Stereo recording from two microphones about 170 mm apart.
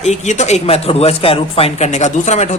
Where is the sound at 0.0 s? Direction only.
45° left (ahead or behind).